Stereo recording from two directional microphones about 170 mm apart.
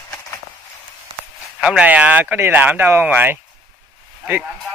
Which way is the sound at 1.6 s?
5° right (ahead or behind).